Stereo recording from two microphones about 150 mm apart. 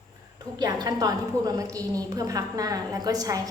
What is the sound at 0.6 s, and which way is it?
A woman's voice, 25° right (ahead or behind).